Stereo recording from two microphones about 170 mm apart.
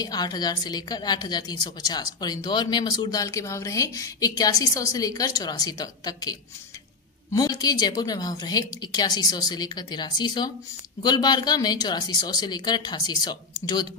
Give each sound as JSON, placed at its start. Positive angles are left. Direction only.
{"t": 0.0, "sound": "a woman's voice", "side_deg": 25}
{"t": 7.3, "sound": "a woman's voice", "side_deg": 20}